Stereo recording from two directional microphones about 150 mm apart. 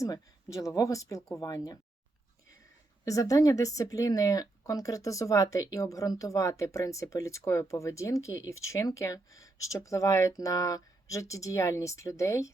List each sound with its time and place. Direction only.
0.0 s speech: 20° left (ahead or behind)
3.0 s speech: 20° left (ahead or behind)